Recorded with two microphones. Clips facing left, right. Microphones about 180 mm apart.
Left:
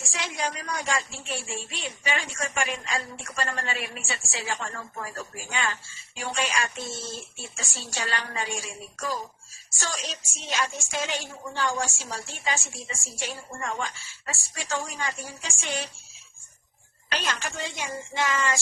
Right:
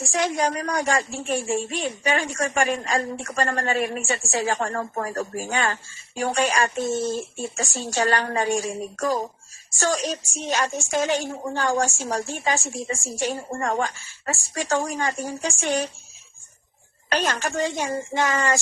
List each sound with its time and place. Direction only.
0.0 s a woman's voice: 45° right (ahead or behind)
12.3 s a woman's voice: 15° right (ahead or behind)
12.9 s a woman's voice: 40° right (ahead or behind)
17.1 s a woman's voice: 45° right (ahead or behind)